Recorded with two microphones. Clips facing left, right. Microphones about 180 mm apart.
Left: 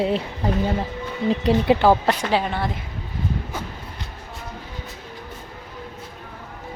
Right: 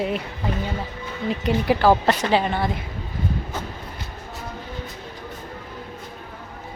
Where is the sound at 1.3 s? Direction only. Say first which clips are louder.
Left 3 dB; 30° left (ahead or behind).